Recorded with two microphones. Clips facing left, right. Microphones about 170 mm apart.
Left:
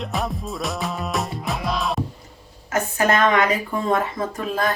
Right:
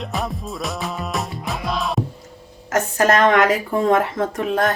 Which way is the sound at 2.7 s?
90° right.